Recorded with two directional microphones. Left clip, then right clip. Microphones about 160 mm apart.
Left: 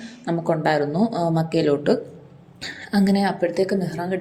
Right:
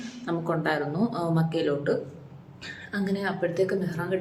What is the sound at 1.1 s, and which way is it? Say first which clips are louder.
A woman's voice: left 6 dB; 35° left (ahead or behind).